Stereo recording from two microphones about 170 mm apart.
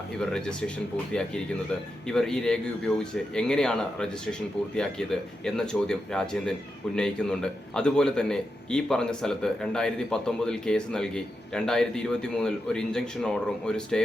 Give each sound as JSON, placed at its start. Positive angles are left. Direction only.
{"t": 0.3, "sound": "a man's voice", "side_deg": 5}
{"t": 2.0, "sound": "a man's voice", "side_deg": 5}